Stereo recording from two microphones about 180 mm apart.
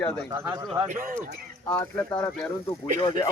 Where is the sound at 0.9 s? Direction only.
50° right (ahead or behind).